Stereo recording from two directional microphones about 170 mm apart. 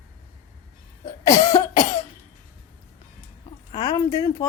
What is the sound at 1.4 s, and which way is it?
Speech, 20° left (ahead or behind).